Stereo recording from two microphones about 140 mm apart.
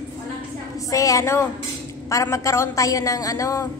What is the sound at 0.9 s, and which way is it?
A woman's voice, 25° left (ahead or behind).